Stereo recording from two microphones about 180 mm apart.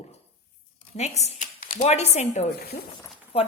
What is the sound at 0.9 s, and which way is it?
A woman's voice, 40° left (ahead or behind).